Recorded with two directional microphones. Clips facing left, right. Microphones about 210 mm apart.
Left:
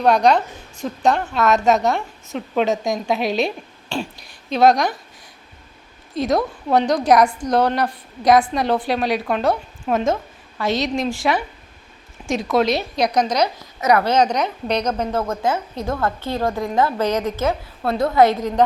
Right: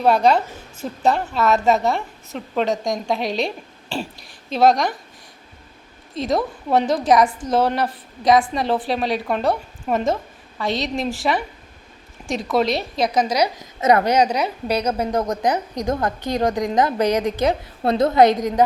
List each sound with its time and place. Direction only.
0.0 s a woman's voice: 5° right (ahead or behind)
6.1 s a woman's voice: centre (ahead or behind)
13.8 s a woman's voice: 25° right (ahead or behind)
14.1 s a woman's voice: 10° right (ahead or behind)